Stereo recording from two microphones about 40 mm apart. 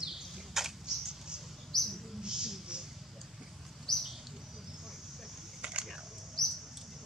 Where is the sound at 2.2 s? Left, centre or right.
Centre.